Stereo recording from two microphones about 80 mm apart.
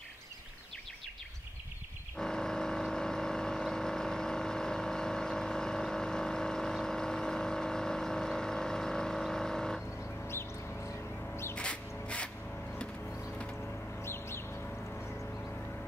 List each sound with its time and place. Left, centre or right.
2.1 s vehicle: centre
11.5 s music: centre
14.0 s music: left